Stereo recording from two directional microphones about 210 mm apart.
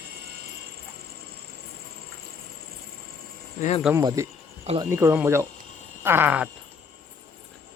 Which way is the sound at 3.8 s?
15° right (ahead or behind).